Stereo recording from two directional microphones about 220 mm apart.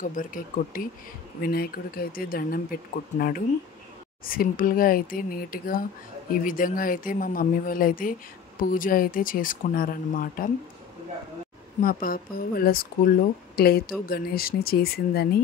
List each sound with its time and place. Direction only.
0.0 s speech: 35° left (ahead or behind)
11.8 s speech: 40° left (ahead or behind)